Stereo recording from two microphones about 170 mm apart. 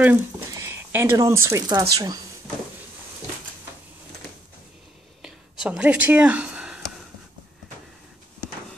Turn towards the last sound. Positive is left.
turn(degrees=-5)  # may be behind; listen again after turning